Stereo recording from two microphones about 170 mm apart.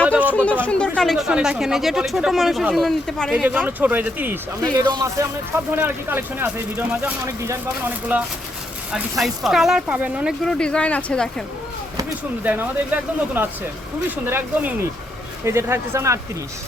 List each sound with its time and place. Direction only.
0.6 s speech: 5° left (ahead or behind)
3.4 s speech: 10° right (ahead or behind)
4.6 s speech: 25° right (ahead or behind)
5.7 s speech: 10° right (ahead or behind); by 11.4 s 5° left (ahead or behind)
12.4 s speech: 10° right (ahead or behind)